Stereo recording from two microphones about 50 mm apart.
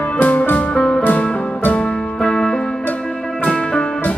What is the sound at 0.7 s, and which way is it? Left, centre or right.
Music, centre.